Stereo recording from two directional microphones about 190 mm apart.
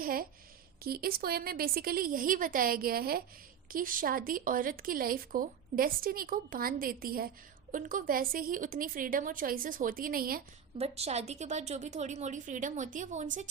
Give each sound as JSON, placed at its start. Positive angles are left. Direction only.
{"t": 0.0, "sound": "speech", "side_deg": -50}
{"t": 10.8, "sound": "a woman's voice", "side_deg": -30}